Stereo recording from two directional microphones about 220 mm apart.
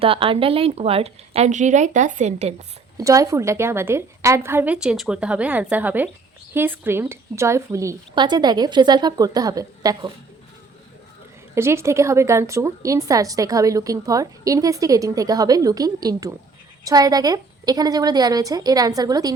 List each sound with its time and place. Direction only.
0.0 s a woman's voice: 25° right (ahead or behind)
3.0 s a woman's voice: 15° right (ahead or behind)
11.5 s a woman's voice: 10° right (ahead or behind)